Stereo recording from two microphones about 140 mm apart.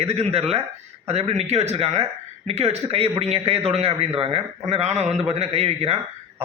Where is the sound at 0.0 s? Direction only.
45° right (ahead or behind).